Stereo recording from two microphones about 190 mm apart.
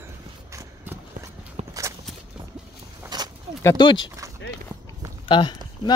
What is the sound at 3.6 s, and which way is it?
Speech, 20° left (ahead or behind).